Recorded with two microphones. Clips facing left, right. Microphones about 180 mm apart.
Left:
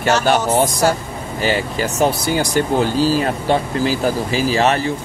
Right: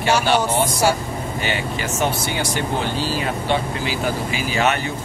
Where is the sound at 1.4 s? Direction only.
40° left (ahead or behind).